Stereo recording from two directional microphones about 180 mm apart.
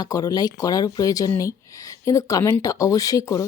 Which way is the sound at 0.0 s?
20° left (ahead or behind).